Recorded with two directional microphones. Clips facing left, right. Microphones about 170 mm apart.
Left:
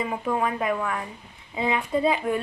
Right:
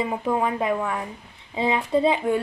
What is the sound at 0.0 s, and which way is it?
A woman's voice, 20° right (ahead or behind).